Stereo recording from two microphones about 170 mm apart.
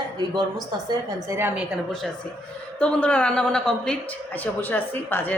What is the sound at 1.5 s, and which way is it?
A woman's voice, centre (ahead or behind).